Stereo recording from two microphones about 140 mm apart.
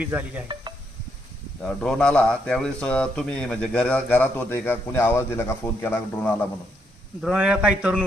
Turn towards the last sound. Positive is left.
turn(degrees=-10)  # may be behind; listen again after turning